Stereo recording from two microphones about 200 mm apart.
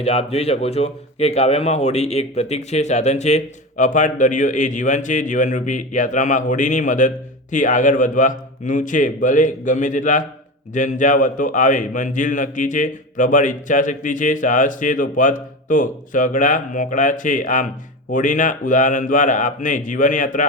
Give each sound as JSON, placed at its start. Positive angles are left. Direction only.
{"t": 0.0, "sound": "a man's voice", "side_deg": 30}